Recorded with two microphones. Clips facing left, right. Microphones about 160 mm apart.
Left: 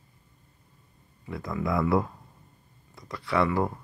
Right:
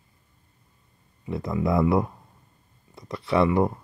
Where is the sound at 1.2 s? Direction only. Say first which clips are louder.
Right 5 dB; 20° right (ahead or behind).